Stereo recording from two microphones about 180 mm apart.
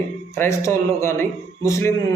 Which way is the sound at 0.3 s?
15° left (ahead or behind).